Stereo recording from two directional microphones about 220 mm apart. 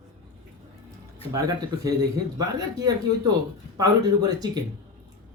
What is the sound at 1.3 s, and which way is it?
Speech, 15° right (ahead or behind).